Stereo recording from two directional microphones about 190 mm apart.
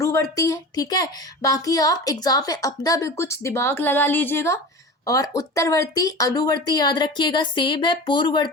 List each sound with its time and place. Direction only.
0.0 s a woman's voice: 15° left (ahead or behind)